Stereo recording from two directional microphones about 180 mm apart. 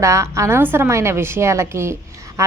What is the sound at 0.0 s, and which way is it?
A woman's voice, 15° right (ahead or behind).